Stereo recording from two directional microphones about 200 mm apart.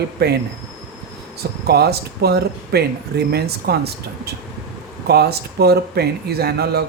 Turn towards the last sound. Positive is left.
turn(degrees=-50)  # may be behind; listen again after turning